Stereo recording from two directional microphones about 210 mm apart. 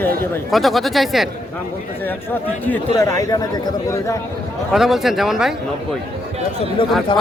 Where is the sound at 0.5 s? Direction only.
Centre (ahead or behind).